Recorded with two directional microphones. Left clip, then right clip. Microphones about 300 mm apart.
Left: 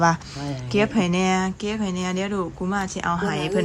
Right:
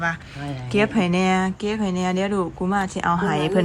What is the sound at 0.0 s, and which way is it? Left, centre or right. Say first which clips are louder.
Speech: left 5 dB; centre.